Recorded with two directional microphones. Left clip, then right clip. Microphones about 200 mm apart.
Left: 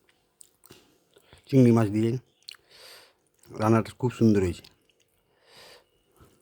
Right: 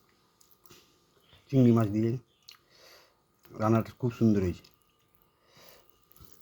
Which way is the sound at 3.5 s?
35° left (ahead or behind).